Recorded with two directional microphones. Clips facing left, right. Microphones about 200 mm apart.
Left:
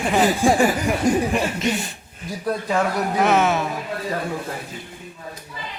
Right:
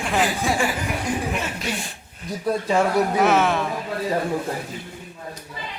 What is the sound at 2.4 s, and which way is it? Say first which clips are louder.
Speech: right 1 dB; 5° right (ahead or behind).